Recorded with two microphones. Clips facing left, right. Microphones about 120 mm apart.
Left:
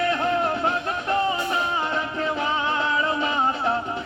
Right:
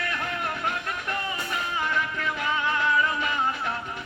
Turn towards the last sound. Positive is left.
turn(degrees=30)  # may be behind; listen again after turning